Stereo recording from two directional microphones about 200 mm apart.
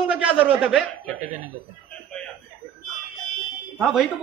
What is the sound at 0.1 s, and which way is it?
Speech, 5° right (ahead or behind).